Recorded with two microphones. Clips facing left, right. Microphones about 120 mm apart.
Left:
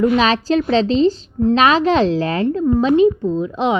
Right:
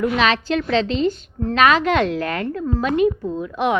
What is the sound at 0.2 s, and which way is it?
A woman's voice, 35° left (ahead or behind).